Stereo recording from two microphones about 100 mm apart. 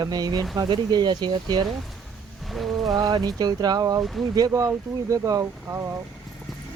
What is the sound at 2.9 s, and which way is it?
Speech, 45° right (ahead or behind).